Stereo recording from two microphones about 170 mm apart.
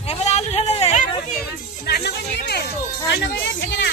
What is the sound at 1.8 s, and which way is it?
Speech, 70° left (ahead or behind).